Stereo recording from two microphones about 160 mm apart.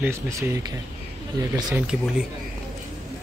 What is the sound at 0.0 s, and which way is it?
Speech, 15° right (ahead or behind).